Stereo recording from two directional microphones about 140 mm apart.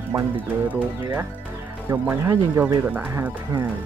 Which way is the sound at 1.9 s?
20° right (ahead or behind).